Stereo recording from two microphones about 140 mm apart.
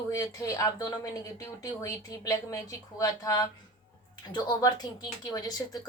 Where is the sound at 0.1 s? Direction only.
25° left (ahead or behind).